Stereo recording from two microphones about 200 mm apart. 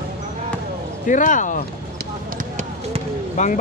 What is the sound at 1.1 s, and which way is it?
Speech, 40° left (ahead or behind).